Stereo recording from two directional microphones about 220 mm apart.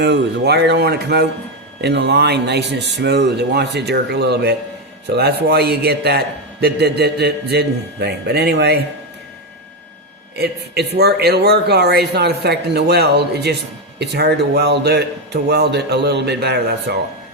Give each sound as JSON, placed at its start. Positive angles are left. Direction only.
{"t": 0.0, "sound": "a man's voice", "side_deg": -50}
{"t": 10.3, "sound": "a man's voice", "side_deg": -45}